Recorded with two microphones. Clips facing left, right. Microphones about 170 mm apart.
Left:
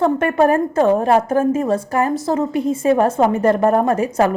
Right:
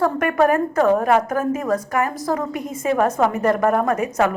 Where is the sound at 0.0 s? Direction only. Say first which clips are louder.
Left 3 dB; 25° left (ahead or behind).